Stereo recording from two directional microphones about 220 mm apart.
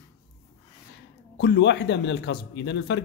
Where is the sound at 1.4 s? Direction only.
50° left (ahead or behind).